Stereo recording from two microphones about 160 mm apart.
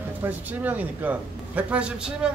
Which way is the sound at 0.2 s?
10° right (ahead or behind).